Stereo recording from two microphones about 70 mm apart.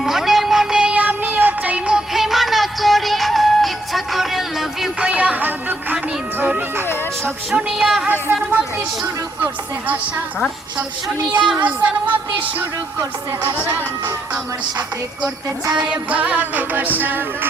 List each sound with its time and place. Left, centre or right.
0.0 s music: centre
0.9 s music: right; by 4.9 s centre
4.9 s music: centre
7.7 s a woman's voice: centre
8.3 s music: right
11.3 s a woman's voice: centre
15.7 s music: centre